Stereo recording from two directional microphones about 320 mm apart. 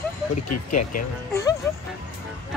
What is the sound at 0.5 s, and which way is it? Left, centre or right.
Speech, left.